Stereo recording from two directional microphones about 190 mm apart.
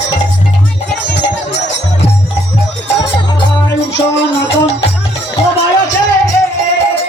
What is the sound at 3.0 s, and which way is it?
Music, 25° left (ahead or behind).